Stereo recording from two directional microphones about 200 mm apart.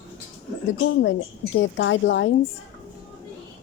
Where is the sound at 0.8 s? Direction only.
65° left (ahead or behind).